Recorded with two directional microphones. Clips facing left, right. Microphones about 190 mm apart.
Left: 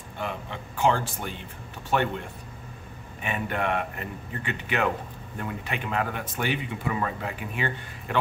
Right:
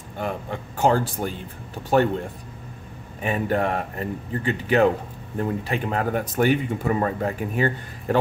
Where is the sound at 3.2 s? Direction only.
35° right (ahead or behind).